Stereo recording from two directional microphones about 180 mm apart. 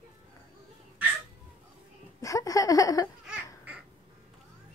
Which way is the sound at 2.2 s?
20° left (ahead or behind).